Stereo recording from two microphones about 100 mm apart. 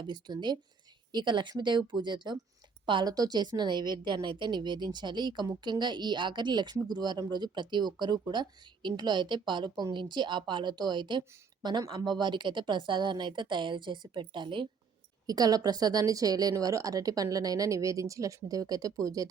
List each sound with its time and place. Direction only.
0.0 s a woman's voice: 50° right (ahead or behind)
15.3 s a woman's voice: 40° right (ahead or behind)